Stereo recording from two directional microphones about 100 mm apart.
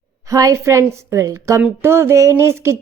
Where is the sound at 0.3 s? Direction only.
35° right (ahead or behind).